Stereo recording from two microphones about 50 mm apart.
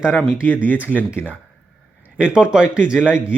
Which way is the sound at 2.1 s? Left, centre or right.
Right.